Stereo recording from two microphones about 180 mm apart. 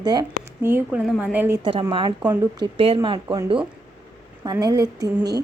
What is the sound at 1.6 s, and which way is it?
A woman's voice, 25° right (ahead or behind).